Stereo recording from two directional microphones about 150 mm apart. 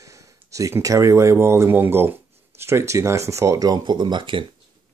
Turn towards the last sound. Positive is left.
turn(degrees=-30)  # may be behind; listen again after turning